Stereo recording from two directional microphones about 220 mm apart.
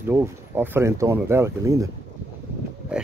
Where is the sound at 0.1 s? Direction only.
10° right (ahead or behind).